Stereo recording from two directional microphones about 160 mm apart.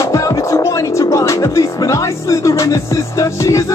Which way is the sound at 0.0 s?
20° left (ahead or behind).